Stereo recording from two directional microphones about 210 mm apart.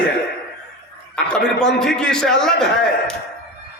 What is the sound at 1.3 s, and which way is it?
A man's voice, 5° left (ahead or behind).